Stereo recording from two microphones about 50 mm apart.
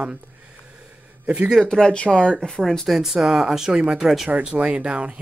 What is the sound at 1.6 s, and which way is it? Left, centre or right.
Speech, centre.